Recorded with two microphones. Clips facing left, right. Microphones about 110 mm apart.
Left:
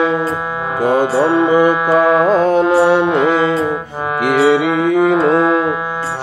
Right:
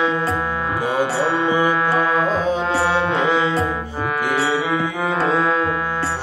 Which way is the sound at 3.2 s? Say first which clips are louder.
Left 5 dB; 50° left (ahead or behind).